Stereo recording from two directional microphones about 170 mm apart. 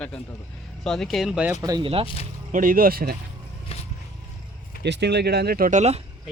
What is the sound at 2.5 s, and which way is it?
Speech, 55° right (ahead or behind).